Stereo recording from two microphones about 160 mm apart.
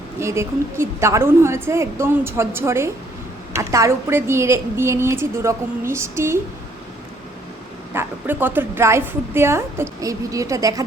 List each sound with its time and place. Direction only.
0.2 s a woman's voice: 15° right (ahead or behind)
7.9 s a woman's voice: 10° right (ahead or behind)